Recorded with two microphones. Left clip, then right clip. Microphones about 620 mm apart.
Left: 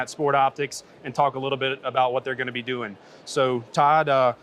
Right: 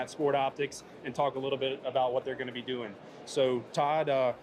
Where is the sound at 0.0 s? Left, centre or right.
Left.